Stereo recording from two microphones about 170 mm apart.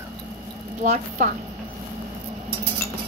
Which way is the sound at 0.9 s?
50° right (ahead or behind).